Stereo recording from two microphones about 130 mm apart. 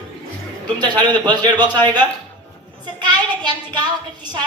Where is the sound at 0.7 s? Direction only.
35° right (ahead or behind).